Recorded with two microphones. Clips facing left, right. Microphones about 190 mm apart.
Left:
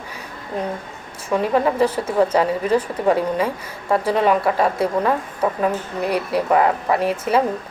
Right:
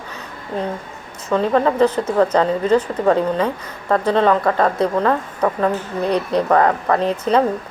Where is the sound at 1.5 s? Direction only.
10° left (ahead or behind).